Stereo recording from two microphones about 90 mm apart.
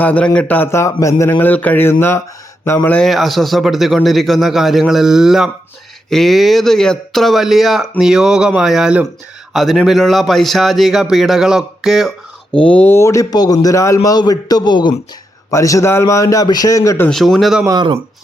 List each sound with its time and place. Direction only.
0.0 s a man's voice: 15° left (ahead or behind)
0.7 s a man's voice: 35° left (ahead or behind)
1.3 s speech: 20° left (ahead or behind)
2.9 s a man's voice: 5° left (ahead or behind)
12.5 s a man's voice: 15° left (ahead or behind)
12.9 s a man's voice: 30° left (ahead or behind)
13.3 s a man's voice: 45° left (ahead or behind)
15.4 s a man's voice: 35° left (ahead or behind)
17.1 s a man's voice: centre (ahead or behind)
17.7 s speech: 65° right (ahead or behind)